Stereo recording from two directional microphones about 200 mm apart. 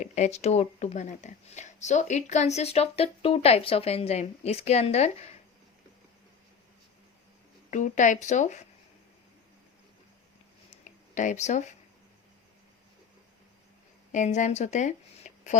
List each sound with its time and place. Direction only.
0.0 s speech: 35° left (ahead or behind)
7.7 s speech: 40° left (ahead or behind)
10.7 s a sound: 40° left (ahead or behind)
14.1 s speech: 40° left (ahead or behind)